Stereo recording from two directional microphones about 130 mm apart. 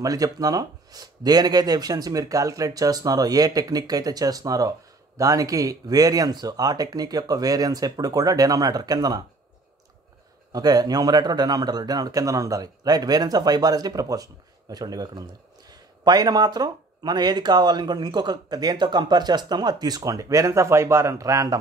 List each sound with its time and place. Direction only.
0.0 s speech: 25° right (ahead or behind)
10.5 s speech: 30° right (ahead or behind)